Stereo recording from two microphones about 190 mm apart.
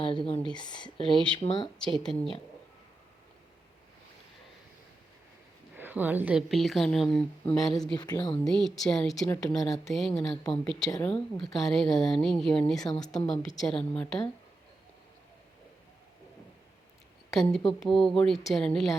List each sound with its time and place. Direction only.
0.0 s speech: 25° left (ahead or behind)
1.0 s a woman's voice: 5° left (ahead or behind)
1.5 s speech: 25° left (ahead or behind)
1.8 s a woman's voice: 5° left (ahead or behind)
5.7 s a woman's voice: 10° right (ahead or behind)
7.9 s speech: 20° left (ahead or behind)
8.4 s a woman's voice: centre (ahead or behind)
17.3 s a woman's voice: centre (ahead or behind)